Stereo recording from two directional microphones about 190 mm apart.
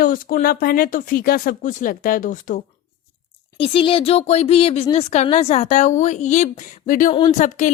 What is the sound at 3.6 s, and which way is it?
A woman's voice, 30° left (ahead or behind).